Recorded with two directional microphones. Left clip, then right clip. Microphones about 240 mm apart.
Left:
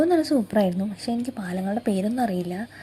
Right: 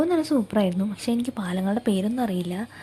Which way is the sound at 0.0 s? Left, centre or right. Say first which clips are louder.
Left 2 dB; centre.